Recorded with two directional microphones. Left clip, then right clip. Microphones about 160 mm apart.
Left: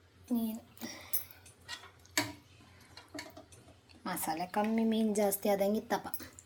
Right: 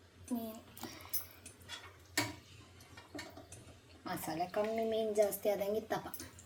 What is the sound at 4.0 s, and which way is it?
A woman's voice, 70° left (ahead or behind).